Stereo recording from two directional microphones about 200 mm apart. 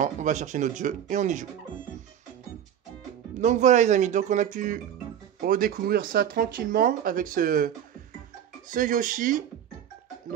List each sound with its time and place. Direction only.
0.0 s speech: 35° right (ahead or behind)
3.3 s speech: 35° right (ahead or behind)